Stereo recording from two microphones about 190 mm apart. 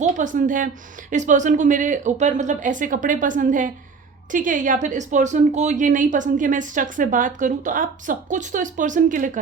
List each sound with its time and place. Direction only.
0.0 s speech: 40° right (ahead or behind)